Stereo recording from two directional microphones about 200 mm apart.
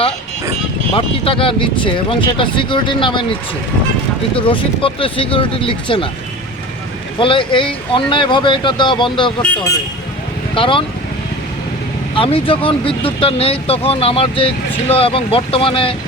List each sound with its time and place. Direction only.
0.9 s speech: 25° left (ahead or behind)
4.4 s speech: 25° left (ahead or behind)
7.2 s speech: 25° left (ahead or behind)
10.5 s speech: 25° left (ahead or behind)
12.1 s speech: 25° left (ahead or behind)